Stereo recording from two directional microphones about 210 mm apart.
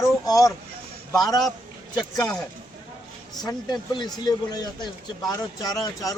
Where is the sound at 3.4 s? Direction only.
20° left (ahead or behind).